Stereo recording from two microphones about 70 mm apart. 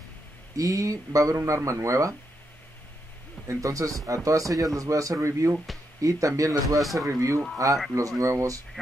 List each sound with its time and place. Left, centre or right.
0.6 s speech: right
3.4 s speech: right
6.8 s speech: centre
7.1 s speech: right